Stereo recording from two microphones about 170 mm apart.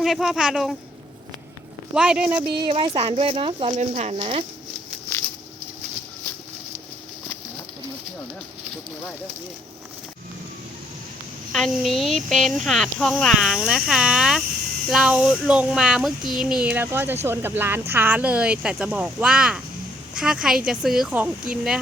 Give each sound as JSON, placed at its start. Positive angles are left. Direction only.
{"t": 0.0, "sound": "speech", "side_deg": 0}
{"t": 1.9, "sound": "speech", "side_deg": -5}
{"t": 2.6, "sound": "speech", "side_deg": -30}
{"t": 11.5, "sound": "speech", "side_deg": 0}